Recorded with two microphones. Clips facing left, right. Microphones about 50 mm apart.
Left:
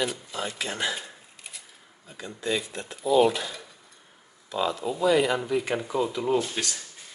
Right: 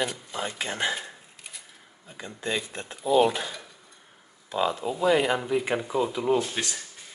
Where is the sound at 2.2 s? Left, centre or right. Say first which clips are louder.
Left 1 dB; right.